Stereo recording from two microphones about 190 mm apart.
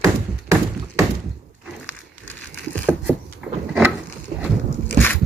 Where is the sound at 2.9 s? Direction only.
10° right (ahead or behind).